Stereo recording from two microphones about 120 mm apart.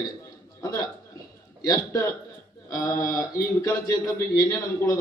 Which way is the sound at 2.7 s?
30° left (ahead or behind).